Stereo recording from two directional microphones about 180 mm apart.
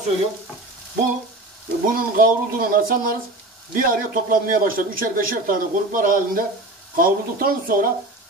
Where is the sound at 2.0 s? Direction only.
55° right (ahead or behind).